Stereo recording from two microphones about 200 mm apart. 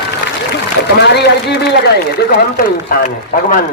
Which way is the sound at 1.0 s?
55° left (ahead or behind).